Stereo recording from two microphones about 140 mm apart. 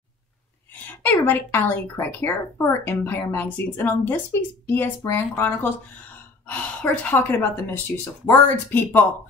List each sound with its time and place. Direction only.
0.8 s speech: 15° left (ahead or behind)